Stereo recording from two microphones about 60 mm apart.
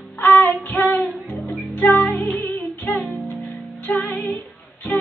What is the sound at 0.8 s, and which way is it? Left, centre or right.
Music, left.